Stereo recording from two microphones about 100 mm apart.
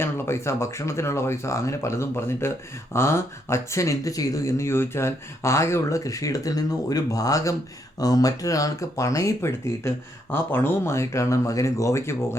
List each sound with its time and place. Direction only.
0.0 s speech: 25° left (ahead or behind)